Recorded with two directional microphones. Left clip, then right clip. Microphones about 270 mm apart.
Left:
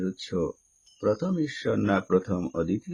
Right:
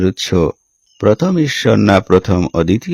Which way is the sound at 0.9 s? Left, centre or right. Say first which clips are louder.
Right 13 dB; right.